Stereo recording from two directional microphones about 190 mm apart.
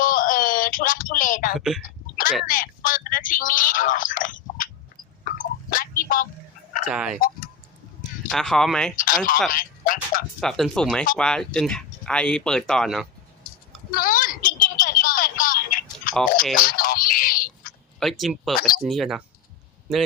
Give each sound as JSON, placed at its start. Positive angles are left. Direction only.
{"t": 0.0, "sound": "a sound", "side_deg": 45}
{"t": 1.5, "sound": "speech", "side_deg": 0}
{"t": 1.8, "sound": "a sound", "side_deg": 45}
{"t": 6.9, "sound": "speech", "side_deg": -5}
{"t": 7.2, "sound": "speech", "side_deg": 50}
{"t": 8.3, "sound": "speech", "side_deg": 0}
{"t": 9.0, "sound": "speech", "side_deg": 45}
{"t": 10.4, "sound": "speech", "side_deg": 0}
{"t": 13.9, "sound": "a sound", "side_deg": 50}
{"t": 16.6, "sound": "fowl", "side_deg": 50}
{"t": 18.0, "sound": "speech", "side_deg": 0}
{"t": 18.5, "sound": "speech", "side_deg": 50}
{"t": 18.9, "sound": "speech", "side_deg": 0}